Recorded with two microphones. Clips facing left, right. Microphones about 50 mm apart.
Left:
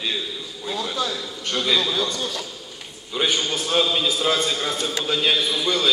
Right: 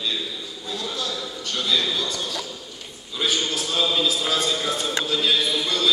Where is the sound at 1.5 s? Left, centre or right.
Left.